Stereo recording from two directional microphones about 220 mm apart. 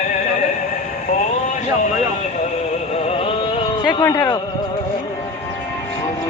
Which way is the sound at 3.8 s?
15° left (ahead or behind).